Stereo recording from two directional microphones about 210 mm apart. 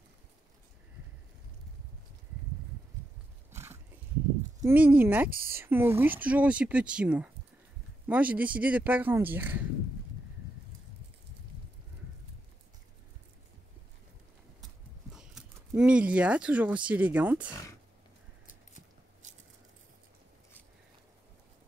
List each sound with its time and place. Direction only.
3.5 s a sound: 10° right (ahead or behind)
4.6 s speech: 5° right (ahead or behind)
5.3 s speech: 45° right (ahead or behind)
5.6 s speech: 10° right (ahead or behind)
14.6 s speech: centre (ahead or behind)